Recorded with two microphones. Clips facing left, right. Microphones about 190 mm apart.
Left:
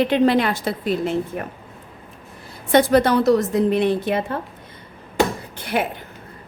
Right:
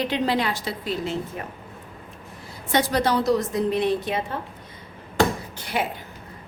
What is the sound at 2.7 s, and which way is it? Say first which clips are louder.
A woman's voice: left 7 dB; 55° left (ahead or behind).